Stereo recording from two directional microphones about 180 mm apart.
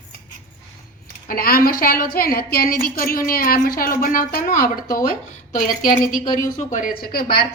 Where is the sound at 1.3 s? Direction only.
55° left (ahead or behind).